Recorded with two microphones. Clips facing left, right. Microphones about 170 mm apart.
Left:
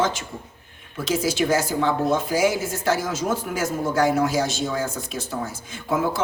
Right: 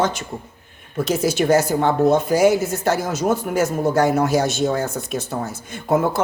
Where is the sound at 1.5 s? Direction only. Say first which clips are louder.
Right 5 dB; 60° right (ahead or behind).